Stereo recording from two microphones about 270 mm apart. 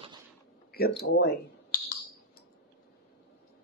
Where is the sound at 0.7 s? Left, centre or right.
Left.